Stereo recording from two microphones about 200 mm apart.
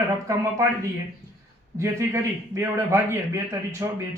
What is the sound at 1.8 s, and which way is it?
A man's voice, 15° right (ahead or behind).